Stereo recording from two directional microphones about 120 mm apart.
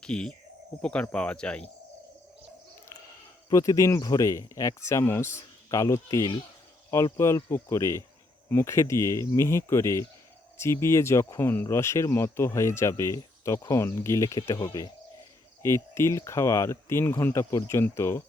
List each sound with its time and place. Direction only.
0.0 s speech: 5° left (ahead or behind)
3.5 s speech: 25° left (ahead or behind)